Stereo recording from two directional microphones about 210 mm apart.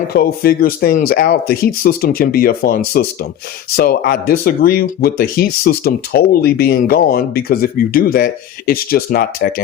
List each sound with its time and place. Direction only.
0.1 s speech: 45° left (ahead or behind)